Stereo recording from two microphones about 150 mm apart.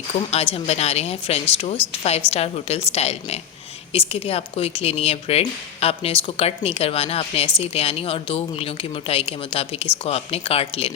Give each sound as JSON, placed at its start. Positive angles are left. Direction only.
{"t": 0.3, "sound": "speech", "side_deg": 45}